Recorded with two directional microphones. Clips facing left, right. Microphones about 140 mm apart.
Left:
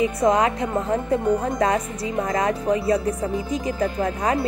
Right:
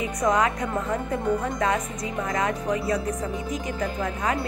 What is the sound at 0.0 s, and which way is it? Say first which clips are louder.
A woman's voice: left 4 dB; 30° left (ahead or behind).